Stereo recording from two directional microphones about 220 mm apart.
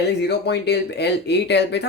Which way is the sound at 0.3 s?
50° left (ahead or behind).